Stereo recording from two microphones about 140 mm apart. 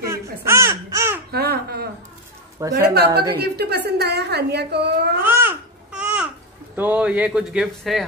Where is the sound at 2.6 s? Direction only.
25° right (ahead or behind).